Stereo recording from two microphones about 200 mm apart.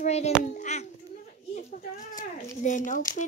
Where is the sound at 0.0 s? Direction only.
35° left (ahead or behind).